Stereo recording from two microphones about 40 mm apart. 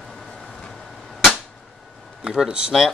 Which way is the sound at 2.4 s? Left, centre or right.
Right.